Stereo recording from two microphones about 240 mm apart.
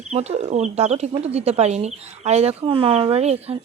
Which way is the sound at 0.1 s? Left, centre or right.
Right.